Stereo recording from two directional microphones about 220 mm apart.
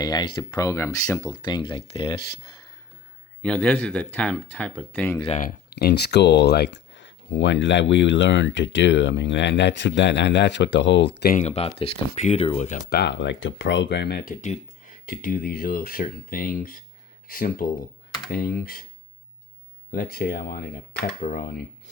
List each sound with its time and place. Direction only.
0.0 s speech: 20° left (ahead or behind)
3.4 s speech: 5° left (ahead or behind)
5.4 s speech: 45° left (ahead or behind)
12.9 s speech: 50° left (ahead or behind)
14.4 s speech: 35° left (ahead or behind)
19.9 s speech: 45° left (ahead or behind)